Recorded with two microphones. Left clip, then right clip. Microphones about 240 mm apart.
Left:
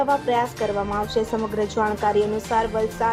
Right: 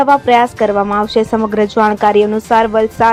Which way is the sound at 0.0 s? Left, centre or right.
Right.